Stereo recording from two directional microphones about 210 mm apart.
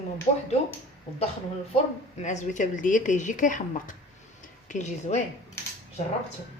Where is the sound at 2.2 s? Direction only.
35° left (ahead or behind).